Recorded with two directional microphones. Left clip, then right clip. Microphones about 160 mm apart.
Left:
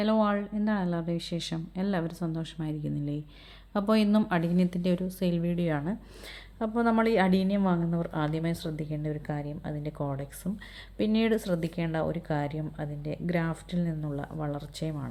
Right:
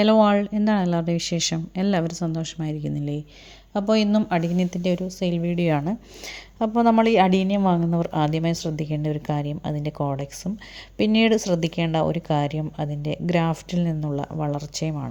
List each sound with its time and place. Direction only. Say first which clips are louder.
0.0 s speech: right 9 dB; 45° right (ahead or behind)
3.7 s a woman's voice: right 5 dB; 15° right (ahead or behind)
5.5 s speech: right 8 dB; 40° right (ahead or behind)